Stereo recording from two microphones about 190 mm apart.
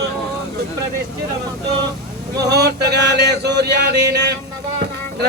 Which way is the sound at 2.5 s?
60° right (ahead or behind).